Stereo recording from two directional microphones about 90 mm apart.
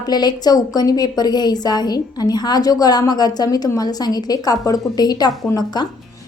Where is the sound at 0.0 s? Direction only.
50° left (ahead or behind).